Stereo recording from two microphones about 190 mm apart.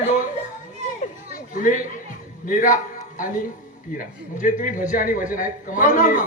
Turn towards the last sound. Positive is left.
turn(degrees=45)  # may be behind; listen again after turning